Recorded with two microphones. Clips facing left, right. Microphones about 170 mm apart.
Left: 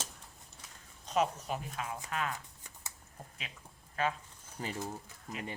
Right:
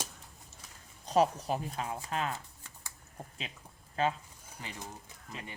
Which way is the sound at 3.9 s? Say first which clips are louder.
Right 3 dB; 30° right (ahead or behind).